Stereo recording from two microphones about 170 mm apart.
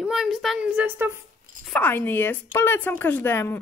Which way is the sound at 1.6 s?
10° left (ahead or behind).